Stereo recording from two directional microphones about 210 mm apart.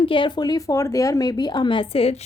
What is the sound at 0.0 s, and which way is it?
Speech, 25° left (ahead or behind).